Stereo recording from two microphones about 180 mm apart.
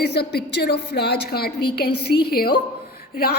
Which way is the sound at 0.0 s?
65° left (ahead or behind).